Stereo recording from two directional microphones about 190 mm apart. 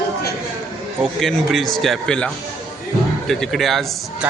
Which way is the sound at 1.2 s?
Centre (ahead or behind).